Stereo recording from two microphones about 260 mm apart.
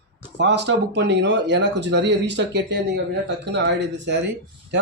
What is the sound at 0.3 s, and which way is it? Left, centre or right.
Speech, right.